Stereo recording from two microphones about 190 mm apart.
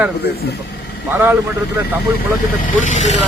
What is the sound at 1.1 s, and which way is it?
Speech, 10° right (ahead or behind).